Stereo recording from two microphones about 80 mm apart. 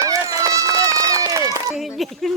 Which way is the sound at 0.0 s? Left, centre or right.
Right.